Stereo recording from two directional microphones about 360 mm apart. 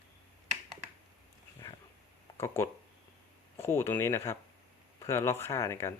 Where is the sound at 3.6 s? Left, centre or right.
Centre.